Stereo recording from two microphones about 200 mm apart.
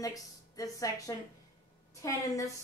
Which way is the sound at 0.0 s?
15° left (ahead or behind).